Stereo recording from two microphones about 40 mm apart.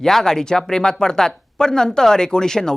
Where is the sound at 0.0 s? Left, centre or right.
Centre.